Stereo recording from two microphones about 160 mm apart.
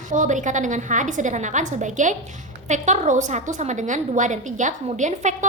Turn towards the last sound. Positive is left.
turn(degrees=-45)  # may be behind; listen again after turning